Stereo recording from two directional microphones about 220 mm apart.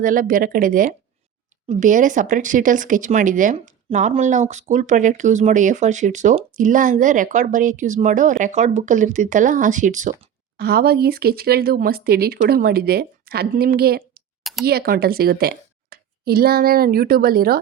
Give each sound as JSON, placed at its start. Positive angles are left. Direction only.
{"t": 0.0, "sound": "a woman's voice", "side_deg": -40}